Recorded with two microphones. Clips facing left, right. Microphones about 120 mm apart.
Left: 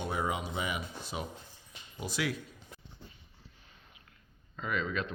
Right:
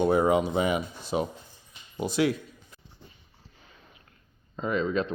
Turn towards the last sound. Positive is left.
turn(degrees=-30)  # may be behind; listen again after turning